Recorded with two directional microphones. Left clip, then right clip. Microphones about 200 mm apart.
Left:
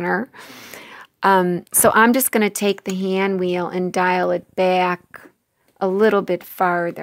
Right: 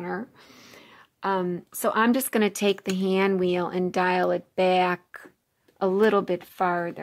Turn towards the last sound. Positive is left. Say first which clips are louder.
# left 6 dB
turn(degrees=25)  # may be behind; listen again after turning